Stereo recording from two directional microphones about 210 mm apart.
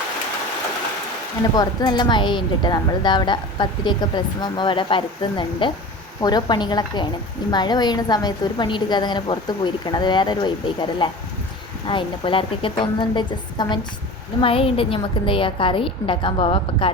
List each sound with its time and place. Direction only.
1.5 s a woman's voice: 20° left (ahead or behind)